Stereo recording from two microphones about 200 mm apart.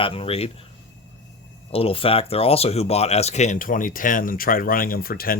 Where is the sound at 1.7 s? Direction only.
30° left (ahead or behind).